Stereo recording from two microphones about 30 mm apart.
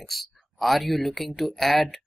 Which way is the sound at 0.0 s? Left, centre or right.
Centre.